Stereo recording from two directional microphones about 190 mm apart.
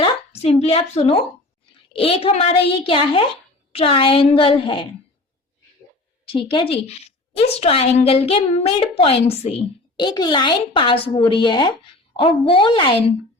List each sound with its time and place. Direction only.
0.6 s a woman's voice: 30° left (ahead or behind)
6.2 s a woman's voice: 25° left (ahead or behind)